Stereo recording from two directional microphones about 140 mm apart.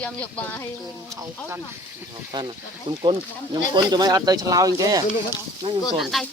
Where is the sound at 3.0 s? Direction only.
30° right (ahead or behind).